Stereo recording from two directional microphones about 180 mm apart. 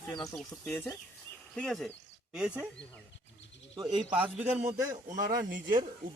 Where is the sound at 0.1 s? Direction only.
25° left (ahead or behind).